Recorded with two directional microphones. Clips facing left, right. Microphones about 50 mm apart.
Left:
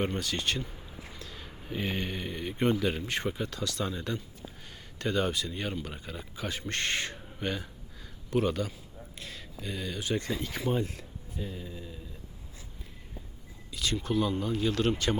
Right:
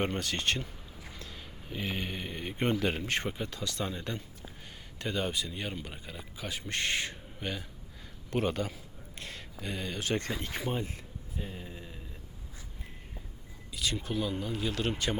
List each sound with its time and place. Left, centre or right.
0.2 s speech: right
1.4 s a sound: centre
2.0 s speech: centre
2.3 s speech: right
2.8 s speech: right
3.2 s speech: centre
8.3 s speech: right
9.1 s speech: right
10.0 s speech: right
10.6 s speech: centre; by 11.9 s right
13.7 s speech: centre